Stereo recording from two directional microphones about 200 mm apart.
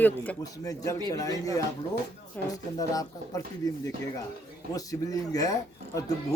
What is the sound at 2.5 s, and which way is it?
Speech, 20° left (ahead or behind).